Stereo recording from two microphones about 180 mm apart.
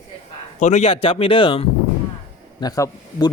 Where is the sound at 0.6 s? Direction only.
40° left (ahead or behind).